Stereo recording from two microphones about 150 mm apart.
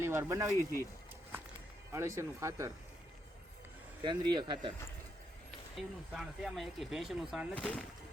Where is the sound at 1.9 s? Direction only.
15° right (ahead or behind).